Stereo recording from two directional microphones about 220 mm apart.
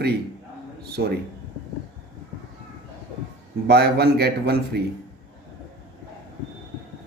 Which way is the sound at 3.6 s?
45° right (ahead or behind).